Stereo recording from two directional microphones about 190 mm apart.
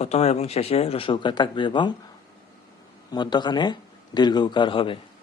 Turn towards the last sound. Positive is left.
turn(degrees=25)  # may be behind; listen again after turning